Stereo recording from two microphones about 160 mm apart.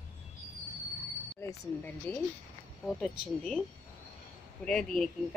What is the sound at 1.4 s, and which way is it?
Speech, 15° left (ahead or behind).